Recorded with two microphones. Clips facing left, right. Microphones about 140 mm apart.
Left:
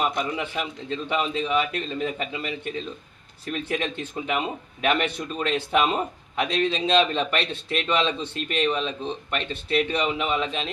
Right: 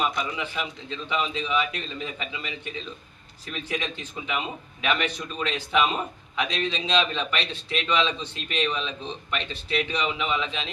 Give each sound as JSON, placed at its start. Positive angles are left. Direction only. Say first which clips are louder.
{"t": 0.1, "sound": "a man's voice", "louder": "left 3 dB", "side_deg": 50}